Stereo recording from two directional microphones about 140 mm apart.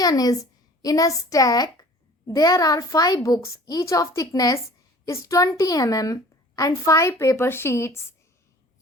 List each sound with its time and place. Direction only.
0.0 s a woman's voice: 25° left (ahead or behind)